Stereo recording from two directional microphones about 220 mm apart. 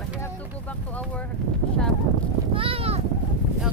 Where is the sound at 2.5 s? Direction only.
25° right (ahead or behind).